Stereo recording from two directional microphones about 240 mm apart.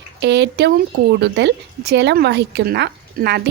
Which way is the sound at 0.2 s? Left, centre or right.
Right.